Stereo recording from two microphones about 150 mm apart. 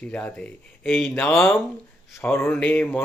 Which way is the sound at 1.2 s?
15° left (ahead or behind).